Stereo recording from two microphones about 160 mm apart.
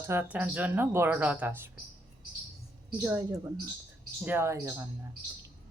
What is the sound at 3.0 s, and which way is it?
Speech, 15° right (ahead or behind).